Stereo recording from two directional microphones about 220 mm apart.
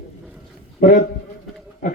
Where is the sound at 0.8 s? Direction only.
40° left (ahead or behind).